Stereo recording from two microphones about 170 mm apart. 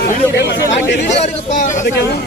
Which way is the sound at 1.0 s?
45° left (ahead or behind).